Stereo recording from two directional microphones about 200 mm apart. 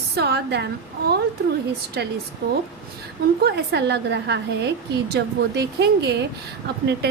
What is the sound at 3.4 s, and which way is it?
A woman's voice, 55° right (ahead or behind).